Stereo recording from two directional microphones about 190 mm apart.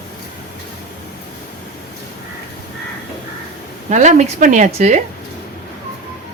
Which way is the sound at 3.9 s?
40° right (ahead or behind).